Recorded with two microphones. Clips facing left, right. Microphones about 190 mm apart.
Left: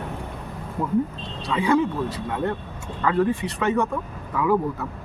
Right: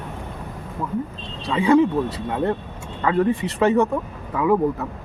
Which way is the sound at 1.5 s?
25° right (ahead or behind).